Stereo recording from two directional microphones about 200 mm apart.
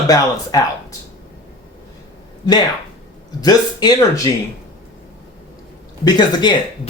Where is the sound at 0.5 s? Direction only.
20° left (ahead or behind).